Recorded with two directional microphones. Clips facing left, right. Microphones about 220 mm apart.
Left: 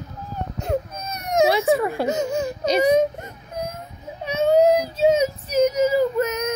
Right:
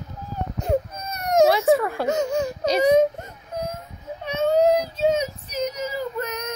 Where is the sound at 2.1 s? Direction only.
5° left (ahead or behind).